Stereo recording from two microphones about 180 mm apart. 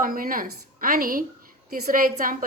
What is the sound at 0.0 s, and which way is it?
A woman's voice, 50° right (ahead or behind).